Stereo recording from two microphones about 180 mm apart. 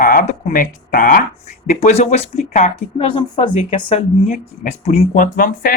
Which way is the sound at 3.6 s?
40° left (ahead or behind).